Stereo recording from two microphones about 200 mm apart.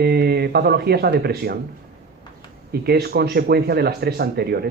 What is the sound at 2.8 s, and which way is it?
Speech, 50° right (ahead or behind).